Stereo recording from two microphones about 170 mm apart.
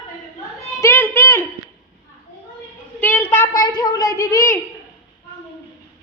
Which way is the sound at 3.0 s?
10° left (ahead or behind).